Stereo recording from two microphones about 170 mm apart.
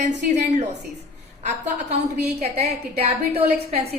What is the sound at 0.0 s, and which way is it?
A woman's voice, 45° right (ahead or behind).